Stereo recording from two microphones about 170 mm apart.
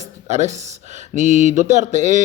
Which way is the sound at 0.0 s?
45° right (ahead or behind).